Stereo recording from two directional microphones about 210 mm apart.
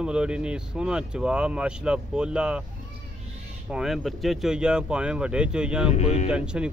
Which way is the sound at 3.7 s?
Centre (ahead or behind).